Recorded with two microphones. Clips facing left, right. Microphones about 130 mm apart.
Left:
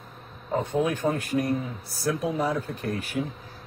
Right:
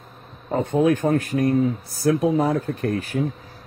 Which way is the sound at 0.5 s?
55° right (ahead or behind).